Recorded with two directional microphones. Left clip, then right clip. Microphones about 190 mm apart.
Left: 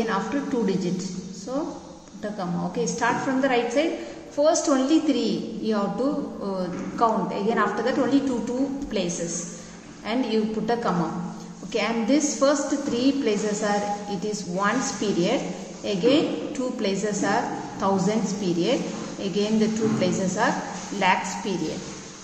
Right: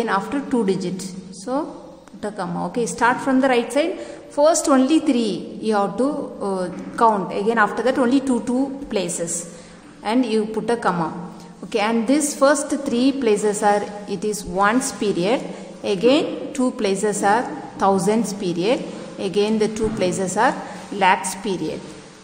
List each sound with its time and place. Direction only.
0.0 s a woman's voice: 40° right (ahead or behind)
10.0 s a woman's voice: 35° right (ahead or behind)